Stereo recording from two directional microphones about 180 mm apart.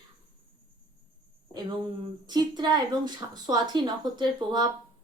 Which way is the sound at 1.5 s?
25° right (ahead or behind).